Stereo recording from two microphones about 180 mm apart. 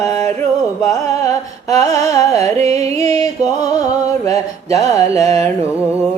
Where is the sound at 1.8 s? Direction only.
35° right (ahead or behind).